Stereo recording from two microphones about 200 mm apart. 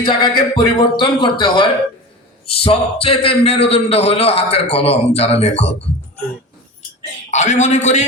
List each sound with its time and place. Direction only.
0.0 s a man's voice: 25° left (ahead or behind)
7.3 s a man's voice: 35° left (ahead or behind)